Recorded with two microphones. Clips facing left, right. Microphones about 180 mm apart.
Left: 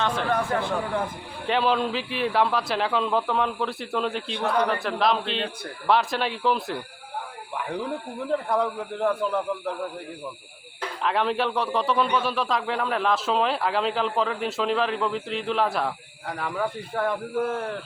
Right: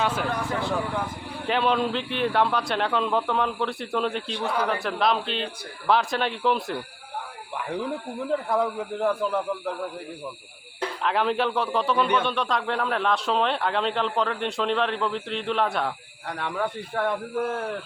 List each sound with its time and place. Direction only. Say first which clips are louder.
0.0 s speech: even; 5° right (ahead or behind)
1.5 s a man's voice: even; centre (ahead or behind)
11.0 s a man's voice: even; centre (ahead or behind)